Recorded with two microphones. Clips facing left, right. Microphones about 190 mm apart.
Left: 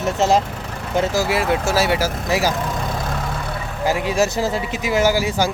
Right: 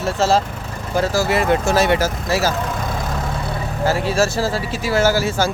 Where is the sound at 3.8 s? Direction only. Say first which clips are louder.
Right 1 dB; 15° left (ahead or behind).